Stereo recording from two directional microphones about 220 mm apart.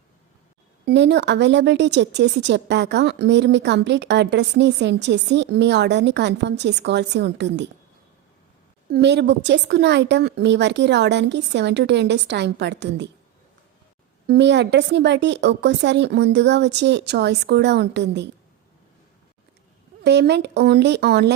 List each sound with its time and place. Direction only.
0.9 s speech: 50° right (ahead or behind)
8.9 s speech: 50° right (ahead or behind)
14.3 s speech: 50° right (ahead or behind)
20.1 s speech: 50° right (ahead or behind)